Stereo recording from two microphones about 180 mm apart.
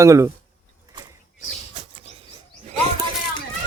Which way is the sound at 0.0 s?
15° right (ahead or behind).